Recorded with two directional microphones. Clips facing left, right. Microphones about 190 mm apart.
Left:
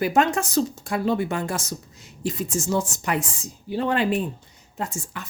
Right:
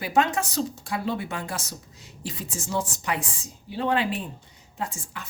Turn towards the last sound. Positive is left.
turn(degrees=45)  # may be behind; listen again after turning